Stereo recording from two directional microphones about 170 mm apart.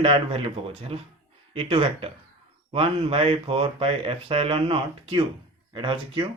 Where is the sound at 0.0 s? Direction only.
30° right (ahead or behind).